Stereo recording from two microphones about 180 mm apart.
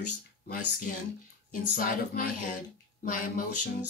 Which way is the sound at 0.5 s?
50° left (ahead or behind).